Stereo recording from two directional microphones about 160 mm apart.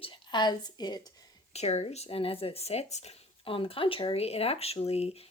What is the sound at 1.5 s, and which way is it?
Speech, 40° left (ahead or behind).